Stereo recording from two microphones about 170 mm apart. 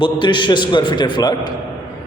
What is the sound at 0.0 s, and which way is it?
A man's voice, 30° left (ahead or behind).